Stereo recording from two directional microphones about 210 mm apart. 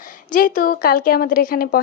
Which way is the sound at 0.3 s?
40° left (ahead or behind).